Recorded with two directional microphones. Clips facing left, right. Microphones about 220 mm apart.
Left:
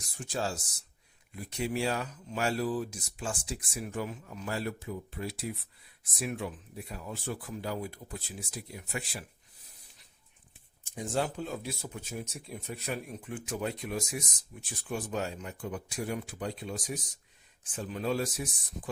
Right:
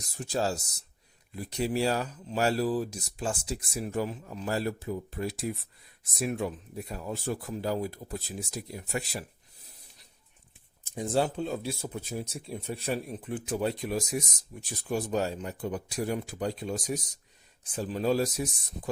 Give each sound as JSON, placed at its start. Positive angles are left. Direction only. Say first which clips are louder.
{"t": 0.2, "sound": "speech", "louder": "right 4 dB", "side_deg": -40}
{"t": 10.9, "sound": "speech", "louder": "right 4 dB", "side_deg": -35}